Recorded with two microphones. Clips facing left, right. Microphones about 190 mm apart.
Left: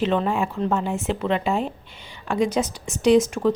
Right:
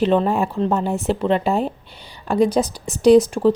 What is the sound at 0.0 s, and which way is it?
Speech, 40° right (ahead or behind).